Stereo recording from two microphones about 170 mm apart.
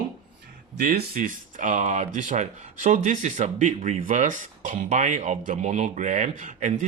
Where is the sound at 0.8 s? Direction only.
65° right (ahead or behind).